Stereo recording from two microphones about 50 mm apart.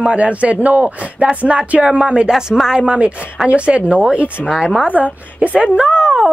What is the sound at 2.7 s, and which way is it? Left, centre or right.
A man's voice, right.